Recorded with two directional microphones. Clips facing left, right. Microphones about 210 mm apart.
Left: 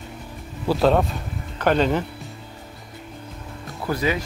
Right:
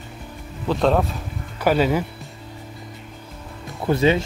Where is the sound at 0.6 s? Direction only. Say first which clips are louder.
Left 1 dB; centre (ahead or behind).